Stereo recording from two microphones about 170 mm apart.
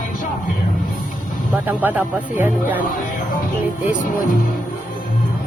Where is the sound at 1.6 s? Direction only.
10° right (ahead or behind).